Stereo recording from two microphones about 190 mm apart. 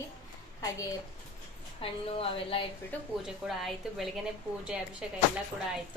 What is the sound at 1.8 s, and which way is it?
Speech, 30° left (ahead or behind).